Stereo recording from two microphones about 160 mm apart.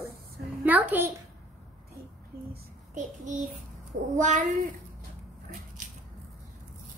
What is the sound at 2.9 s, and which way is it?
Child singing, 50° right (ahead or behind).